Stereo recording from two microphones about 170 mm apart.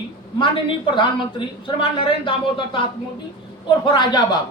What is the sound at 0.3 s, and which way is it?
A woman's voice, 30° left (ahead or behind).